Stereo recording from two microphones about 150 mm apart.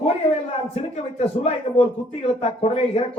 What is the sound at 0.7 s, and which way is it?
Speech, 40° left (ahead or behind).